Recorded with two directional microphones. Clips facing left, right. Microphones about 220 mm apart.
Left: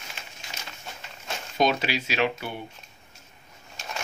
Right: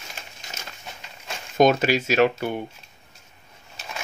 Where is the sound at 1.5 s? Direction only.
45° right (ahead or behind).